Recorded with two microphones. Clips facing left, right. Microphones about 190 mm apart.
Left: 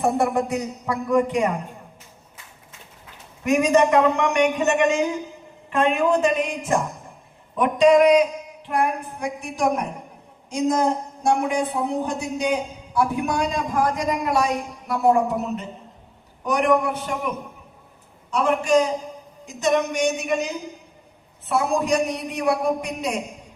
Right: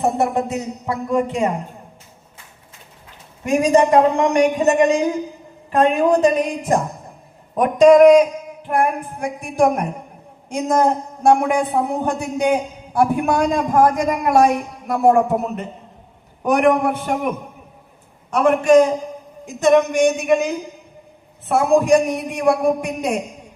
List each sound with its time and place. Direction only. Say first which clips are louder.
0.0 s a man's voice: right 2 dB; 25° right (ahead or behind)
3.4 s a man's voice: right 2 dB; 30° right (ahead or behind); by 23.2 s 50° right (ahead or behind)